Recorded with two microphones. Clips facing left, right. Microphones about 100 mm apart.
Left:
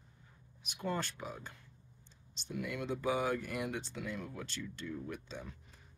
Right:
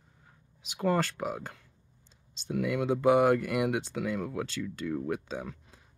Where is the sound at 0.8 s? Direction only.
90° right.